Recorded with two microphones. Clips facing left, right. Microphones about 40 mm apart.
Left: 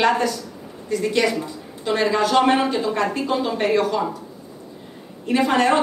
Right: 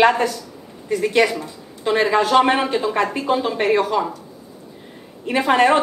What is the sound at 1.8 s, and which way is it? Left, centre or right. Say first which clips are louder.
A woman's voice: right 2 dB; centre.